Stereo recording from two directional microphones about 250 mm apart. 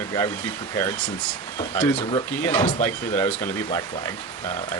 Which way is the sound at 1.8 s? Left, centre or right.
Centre.